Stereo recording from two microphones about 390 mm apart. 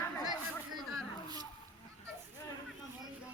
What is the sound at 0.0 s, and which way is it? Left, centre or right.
Chatter, centre.